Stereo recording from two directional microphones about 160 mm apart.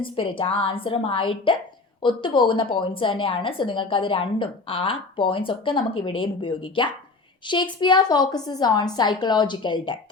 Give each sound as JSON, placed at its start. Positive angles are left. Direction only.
{"t": 0.0, "sound": "a woman's voice", "side_deg": 30}